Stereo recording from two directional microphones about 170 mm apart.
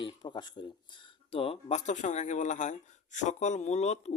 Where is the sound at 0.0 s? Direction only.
25° left (ahead or behind).